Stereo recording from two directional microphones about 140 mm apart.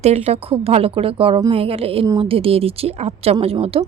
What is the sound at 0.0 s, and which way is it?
A woman's voice, 50° right (ahead or behind).